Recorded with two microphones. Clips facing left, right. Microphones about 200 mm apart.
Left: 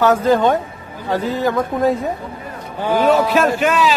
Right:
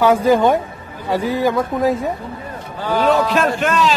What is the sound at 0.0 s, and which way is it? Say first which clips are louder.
Speech: right 1 dB; 10° right (ahead or behind).